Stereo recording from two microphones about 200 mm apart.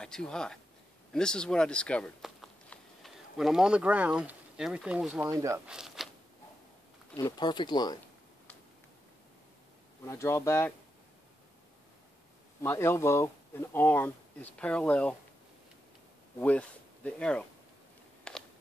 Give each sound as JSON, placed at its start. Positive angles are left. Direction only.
{"t": 0.0, "sound": "speech", "side_deg": 5}
{"t": 5.7, "sound": "zipper", "side_deg": -5}
{"t": 7.2, "sound": "speech", "side_deg": 20}
{"t": 10.0, "sound": "speech", "side_deg": 15}
{"t": 12.6, "sound": "speech", "side_deg": 15}
{"t": 16.3, "sound": "speech", "side_deg": 5}
{"t": 18.3, "sound": "a sound", "side_deg": 5}